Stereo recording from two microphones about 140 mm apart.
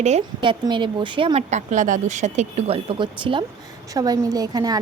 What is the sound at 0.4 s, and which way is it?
Speech, 35° right (ahead or behind).